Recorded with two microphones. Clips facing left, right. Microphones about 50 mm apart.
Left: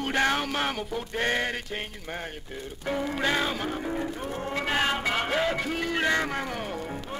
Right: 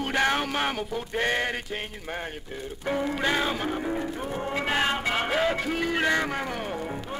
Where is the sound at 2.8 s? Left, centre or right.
Centre.